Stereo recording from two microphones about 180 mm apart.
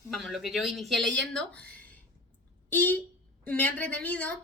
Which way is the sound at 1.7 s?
10° left (ahead or behind).